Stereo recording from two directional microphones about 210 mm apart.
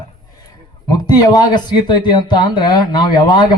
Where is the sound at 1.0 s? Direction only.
20° left (ahead or behind).